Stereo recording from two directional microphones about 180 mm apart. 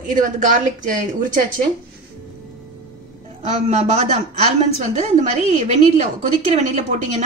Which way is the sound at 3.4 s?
35° right (ahead or behind).